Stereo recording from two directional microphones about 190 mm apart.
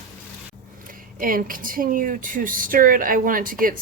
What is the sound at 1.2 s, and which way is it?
Speech, 45° right (ahead or behind).